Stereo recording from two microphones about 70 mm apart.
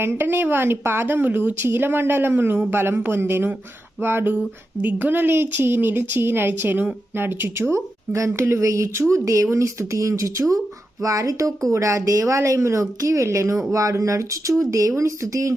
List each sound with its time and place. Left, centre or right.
0.0 s speech: right